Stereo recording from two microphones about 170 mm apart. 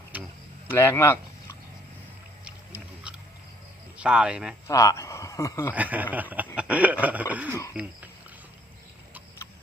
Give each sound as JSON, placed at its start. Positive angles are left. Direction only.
{"t": 0.1, "sound": "a sound", "side_deg": -10}
{"t": 0.7, "sound": "speech", "side_deg": 15}
{"t": 3.9, "sound": "speech", "side_deg": -5}
{"t": 4.7, "sound": "speech", "side_deg": 20}
{"t": 5.7, "sound": "speech", "side_deg": -10}